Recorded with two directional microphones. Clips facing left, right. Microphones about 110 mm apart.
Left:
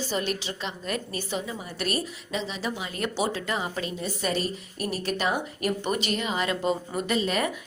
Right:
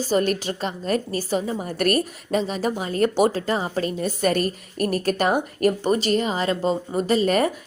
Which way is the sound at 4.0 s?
50° right (ahead or behind).